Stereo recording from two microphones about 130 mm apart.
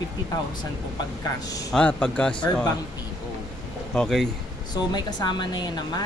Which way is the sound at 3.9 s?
Centre (ahead or behind).